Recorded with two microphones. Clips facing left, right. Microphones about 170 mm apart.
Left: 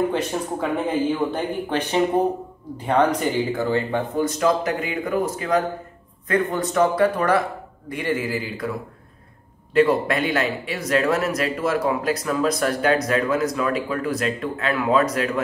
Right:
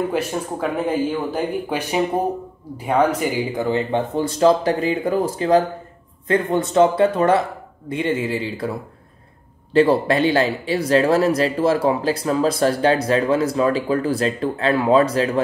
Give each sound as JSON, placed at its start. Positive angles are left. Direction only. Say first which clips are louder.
{"t": 0.1, "sound": "speech", "louder": "right 1 dB", "side_deg": -5}
{"t": 9.8, "sound": "speech", "louder": "right 3 dB", "side_deg": -30}